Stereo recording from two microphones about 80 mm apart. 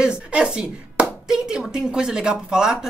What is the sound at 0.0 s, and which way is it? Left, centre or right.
Speech, centre.